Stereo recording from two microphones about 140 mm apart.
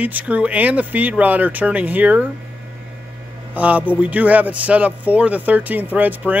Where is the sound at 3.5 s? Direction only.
10° right (ahead or behind).